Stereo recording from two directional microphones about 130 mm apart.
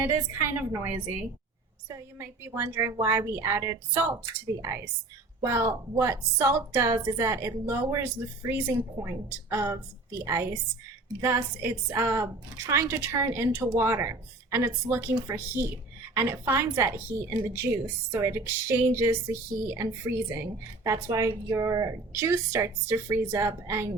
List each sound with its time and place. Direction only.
0.0 s a woman's voice: 20° right (ahead or behind)